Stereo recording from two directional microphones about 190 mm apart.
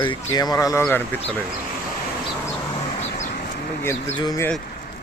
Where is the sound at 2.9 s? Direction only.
30° left (ahead or behind).